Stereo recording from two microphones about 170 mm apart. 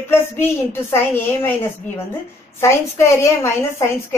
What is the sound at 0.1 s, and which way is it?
Speech, 15° left (ahead or behind).